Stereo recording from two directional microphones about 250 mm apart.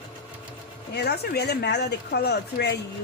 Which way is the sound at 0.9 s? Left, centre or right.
Left.